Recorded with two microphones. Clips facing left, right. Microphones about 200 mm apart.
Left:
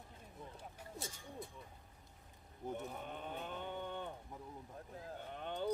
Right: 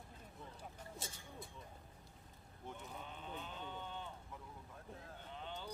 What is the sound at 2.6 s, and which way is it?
Livestock, 50° left (ahead or behind).